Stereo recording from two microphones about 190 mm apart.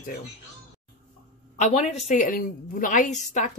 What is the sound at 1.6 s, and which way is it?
Speech, 35° left (ahead or behind).